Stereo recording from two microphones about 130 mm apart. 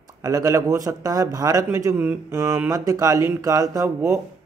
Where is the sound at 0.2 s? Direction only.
25° right (ahead or behind).